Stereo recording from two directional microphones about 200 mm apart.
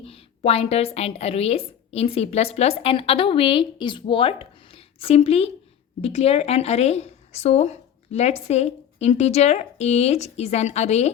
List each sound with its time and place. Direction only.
0.0 s a woman's voice: 30° left (ahead or behind)